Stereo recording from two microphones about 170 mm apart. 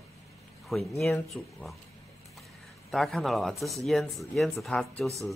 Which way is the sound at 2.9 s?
Centre (ahead or behind).